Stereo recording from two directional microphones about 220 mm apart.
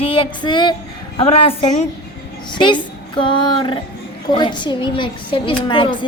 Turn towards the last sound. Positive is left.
turn(degrees=20)  # may be behind; listen again after turning